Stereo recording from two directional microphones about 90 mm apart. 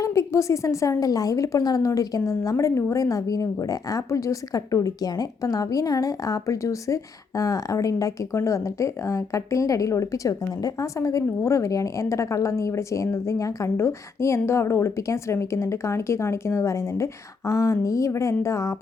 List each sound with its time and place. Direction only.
0.0 s a woman's voice: 35° left (ahead or behind)